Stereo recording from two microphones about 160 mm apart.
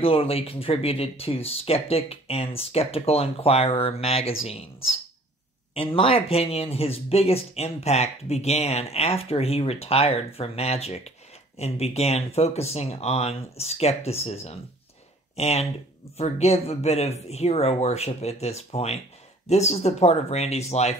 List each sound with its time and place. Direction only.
0.0 s speech: 35° left (ahead or behind)